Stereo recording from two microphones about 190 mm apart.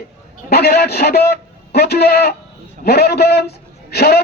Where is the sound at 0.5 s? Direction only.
55° left (ahead or behind).